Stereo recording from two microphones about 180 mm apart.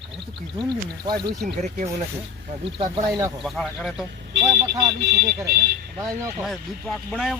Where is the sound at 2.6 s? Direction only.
30° right (ahead or behind).